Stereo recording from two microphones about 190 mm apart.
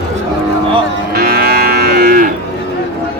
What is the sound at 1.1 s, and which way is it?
Moo, 55° right (ahead or behind).